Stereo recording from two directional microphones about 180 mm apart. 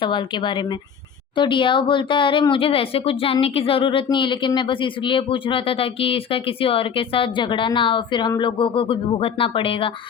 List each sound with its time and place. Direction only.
0.0 s speech: 25° left (ahead or behind)